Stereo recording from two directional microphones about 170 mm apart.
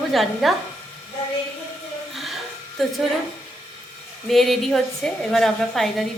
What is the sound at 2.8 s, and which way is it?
Speech, centre (ahead or behind).